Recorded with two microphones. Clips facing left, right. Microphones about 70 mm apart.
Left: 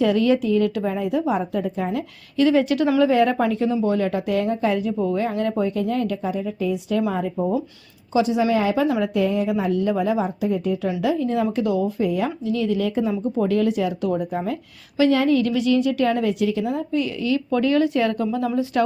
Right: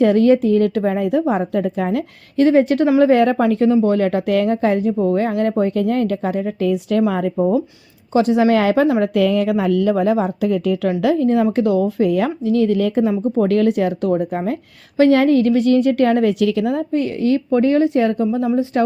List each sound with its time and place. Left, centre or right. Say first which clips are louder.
0.0 s a woman's voice: right 6 dB; right
2.4 s a woman's voice: right 4 dB; right
7.3 s speech: right 7 dB; right
8.1 s speech: right 5 dB; right
9.1 s speech: right 5 dB; right
9.9 s a woman's voice: right 5 dB; right
11.0 s speech: right 6 dB; right
13.5 s speech: right 5 dB; right
16.9 s a woman's voice: right 4 dB; right
17.5 s speech: right 3 dB; right